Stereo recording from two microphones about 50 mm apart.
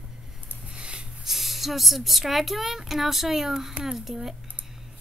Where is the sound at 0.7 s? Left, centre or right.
Centre.